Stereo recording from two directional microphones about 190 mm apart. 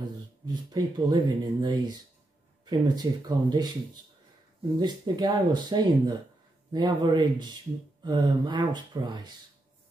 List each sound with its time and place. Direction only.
0.5 s speech: 20° right (ahead or behind)